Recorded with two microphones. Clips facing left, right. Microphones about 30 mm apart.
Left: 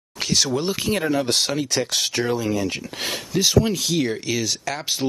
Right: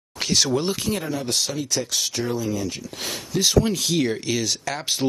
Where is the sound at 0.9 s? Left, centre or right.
Left.